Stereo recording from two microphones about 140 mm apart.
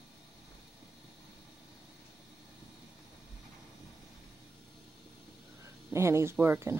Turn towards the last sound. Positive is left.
turn(degrees=-20)  # may be behind; listen again after turning